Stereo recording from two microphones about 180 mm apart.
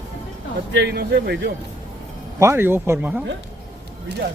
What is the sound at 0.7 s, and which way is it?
Speech, 65° right (ahead or behind).